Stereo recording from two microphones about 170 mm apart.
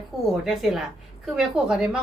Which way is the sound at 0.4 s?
Centre (ahead or behind).